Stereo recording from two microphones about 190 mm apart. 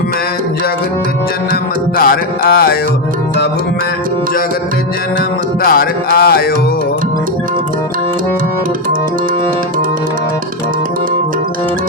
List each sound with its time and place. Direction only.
2.0 s music: 55° left (ahead or behind)
5.6 s music: 50° left (ahead or behind)